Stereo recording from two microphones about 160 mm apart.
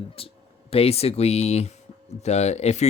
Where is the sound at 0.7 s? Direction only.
40° left (ahead or behind).